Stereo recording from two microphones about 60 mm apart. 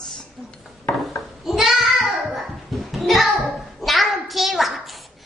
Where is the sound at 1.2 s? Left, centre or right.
Centre.